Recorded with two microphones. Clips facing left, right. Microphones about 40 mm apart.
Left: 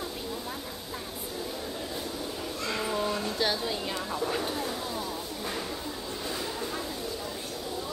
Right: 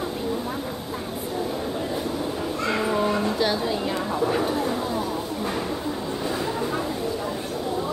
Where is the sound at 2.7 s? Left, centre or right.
Right.